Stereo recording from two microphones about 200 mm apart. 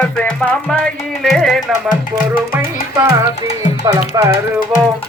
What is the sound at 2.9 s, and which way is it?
Music, 15° right (ahead or behind).